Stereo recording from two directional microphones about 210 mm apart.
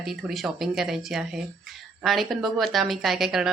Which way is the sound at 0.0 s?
Centre (ahead or behind).